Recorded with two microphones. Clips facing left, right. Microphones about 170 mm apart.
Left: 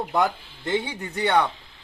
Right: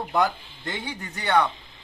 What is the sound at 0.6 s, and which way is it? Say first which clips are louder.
Speech: left 7 dB; 25° left (ahead or behind).